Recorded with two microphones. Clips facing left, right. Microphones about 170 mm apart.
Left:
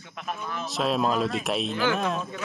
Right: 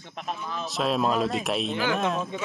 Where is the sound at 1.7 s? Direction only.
15° right (ahead or behind).